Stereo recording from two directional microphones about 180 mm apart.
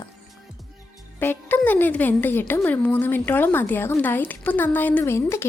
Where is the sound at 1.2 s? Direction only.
10° left (ahead or behind).